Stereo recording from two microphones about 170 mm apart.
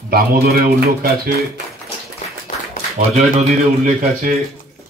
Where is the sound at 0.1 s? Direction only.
65° right (ahead or behind).